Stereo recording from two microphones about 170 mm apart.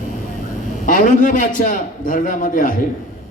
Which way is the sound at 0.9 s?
50° left (ahead or behind).